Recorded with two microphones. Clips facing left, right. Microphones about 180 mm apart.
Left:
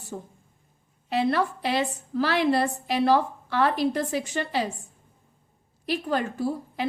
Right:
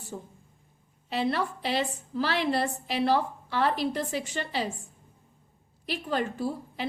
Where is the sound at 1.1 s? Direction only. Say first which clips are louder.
Left 4 dB; 45° left (ahead or behind).